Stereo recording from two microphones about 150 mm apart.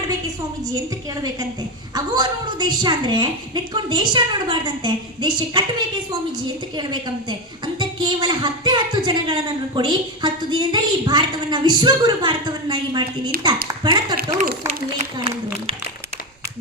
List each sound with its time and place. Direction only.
1.1 s a woman's voice: 25° right (ahead or behind)
6.7 s a woman's voice: 30° right (ahead or behind)
14.7 s a woman's voice: 40° right (ahead or behind)